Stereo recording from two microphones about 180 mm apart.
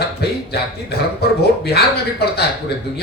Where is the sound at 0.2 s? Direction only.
65° left (ahead or behind).